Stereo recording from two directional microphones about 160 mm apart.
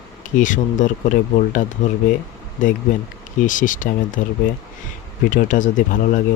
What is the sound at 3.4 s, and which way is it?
Speech, 55° left (ahead or behind).